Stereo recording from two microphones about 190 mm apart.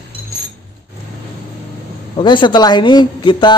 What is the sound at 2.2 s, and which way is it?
Speech, 25° left (ahead or behind).